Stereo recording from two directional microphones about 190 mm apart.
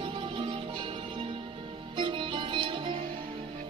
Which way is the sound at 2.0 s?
25° right (ahead or behind).